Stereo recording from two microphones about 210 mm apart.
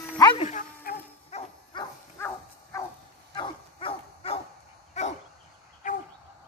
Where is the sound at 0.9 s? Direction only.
45° left (ahead or behind).